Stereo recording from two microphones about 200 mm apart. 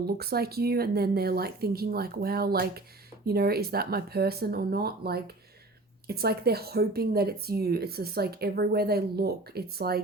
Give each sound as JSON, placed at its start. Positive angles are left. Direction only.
{"t": 0.2, "sound": "speech", "side_deg": -50}